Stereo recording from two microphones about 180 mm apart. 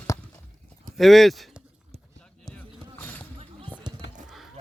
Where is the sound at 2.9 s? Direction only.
10° left (ahead or behind).